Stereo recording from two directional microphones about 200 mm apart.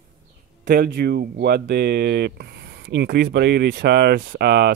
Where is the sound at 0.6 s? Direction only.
55° right (ahead or behind).